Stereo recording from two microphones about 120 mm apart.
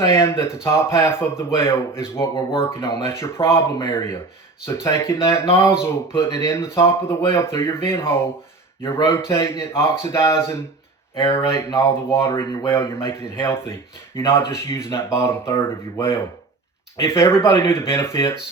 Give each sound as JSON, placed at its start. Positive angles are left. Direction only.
{"t": 0.1, "sound": "speech", "side_deg": 20}